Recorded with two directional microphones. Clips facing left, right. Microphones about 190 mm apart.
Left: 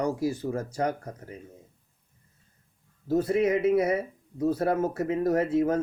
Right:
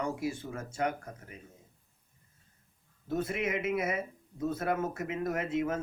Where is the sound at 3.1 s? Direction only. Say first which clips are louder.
Left 9 dB; 30° left (ahead or behind).